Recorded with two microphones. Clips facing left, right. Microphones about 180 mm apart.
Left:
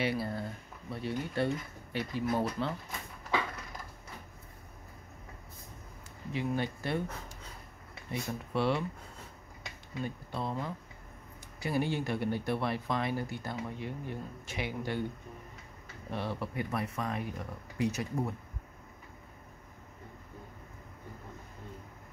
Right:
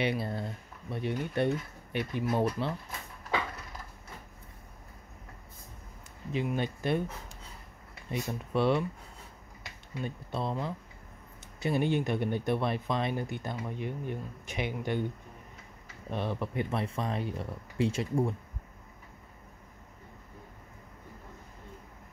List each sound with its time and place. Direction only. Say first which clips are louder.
0.0 s speech: right 1 dB; 20° right (ahead or behind)
6.3 s speech: right 2 dB; 20° right (ahead or behind)
8.1 s speech: right 3 dB; 20° right (ahead or behind)
10.0 s speech: right 3 dB; 20° right (ahead or behind)
16.1 s speech: right 3 dB; 20° right (ahead or behind)